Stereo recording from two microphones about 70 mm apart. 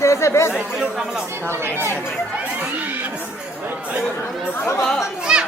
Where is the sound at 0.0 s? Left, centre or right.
Left.